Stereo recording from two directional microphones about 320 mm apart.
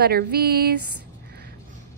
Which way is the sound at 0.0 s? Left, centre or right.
Right.